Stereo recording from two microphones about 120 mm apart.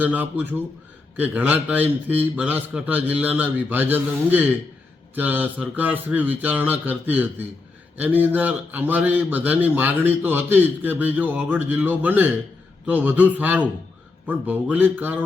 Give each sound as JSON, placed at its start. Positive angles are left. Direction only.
{"t": 0.0, "sound": "a man's voice", "side_deg": -15}